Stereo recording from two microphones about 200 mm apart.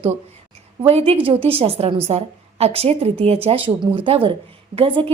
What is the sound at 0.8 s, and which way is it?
A woman's voice, 30° right (ahead or behind).